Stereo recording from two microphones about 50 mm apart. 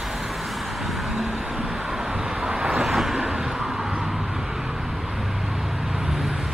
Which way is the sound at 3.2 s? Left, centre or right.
Centre.